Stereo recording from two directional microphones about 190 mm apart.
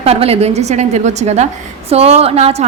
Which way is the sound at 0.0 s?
30° right (ahead or behind).